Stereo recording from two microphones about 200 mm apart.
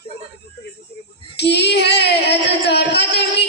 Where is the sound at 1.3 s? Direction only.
55° left (ahead or behind).